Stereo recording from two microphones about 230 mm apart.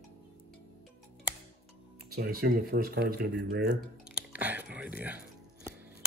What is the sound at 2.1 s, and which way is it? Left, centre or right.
Speech, right.